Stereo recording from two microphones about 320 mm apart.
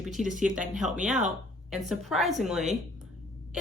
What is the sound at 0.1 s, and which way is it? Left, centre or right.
Speech, centre.